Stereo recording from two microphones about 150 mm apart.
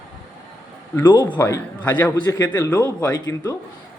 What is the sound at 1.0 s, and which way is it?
A man's voice, 30° left (ahead or behind).